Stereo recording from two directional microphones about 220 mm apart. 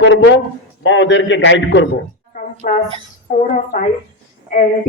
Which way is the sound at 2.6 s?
35° left (ahead or behind).